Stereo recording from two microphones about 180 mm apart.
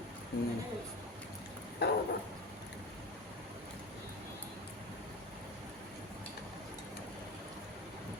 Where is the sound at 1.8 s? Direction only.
65° left (ahead or behind).